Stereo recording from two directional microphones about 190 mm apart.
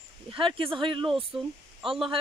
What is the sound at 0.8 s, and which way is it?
Speech, 25° right (ahead or behind).